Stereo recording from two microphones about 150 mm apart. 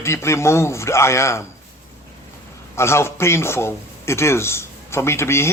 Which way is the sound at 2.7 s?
15° left (ahead or behind).